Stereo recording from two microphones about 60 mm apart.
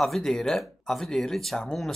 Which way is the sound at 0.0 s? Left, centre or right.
Centre.